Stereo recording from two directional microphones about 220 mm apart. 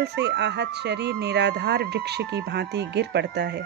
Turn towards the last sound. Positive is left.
turn(degrees=-50)  # may be behind; listen again after turning